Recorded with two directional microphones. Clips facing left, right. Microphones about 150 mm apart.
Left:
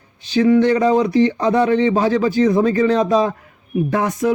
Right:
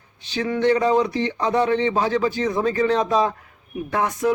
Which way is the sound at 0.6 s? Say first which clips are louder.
Left 3 dB; 40° left (ahead or behind).